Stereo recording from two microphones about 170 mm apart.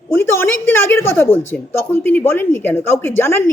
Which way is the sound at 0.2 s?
15° left (ahead or behind).